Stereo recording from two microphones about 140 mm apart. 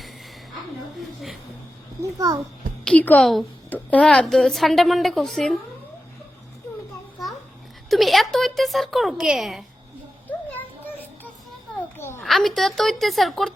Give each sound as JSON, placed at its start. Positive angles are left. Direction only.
{"t": 2.0, "sound": "a child's voice", "side_deg": -25}
{"t": 2.8, "sound": "a woman's voice", "side_deg": 10}
{"t": 7.9, "sound": "a woman's voice", "side_deg": 0}
{"t": 11.9, "sound": "a sound", "side_deg": 15}
{"t": 12.2, "sound": "a woman's voice", "side_deg": 0}